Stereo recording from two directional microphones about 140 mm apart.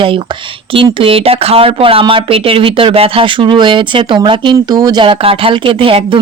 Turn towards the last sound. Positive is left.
turn(degrees=-40)  # may be behind; listen again after turning